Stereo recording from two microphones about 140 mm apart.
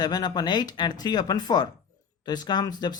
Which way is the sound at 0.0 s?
30° left (ahead or behind).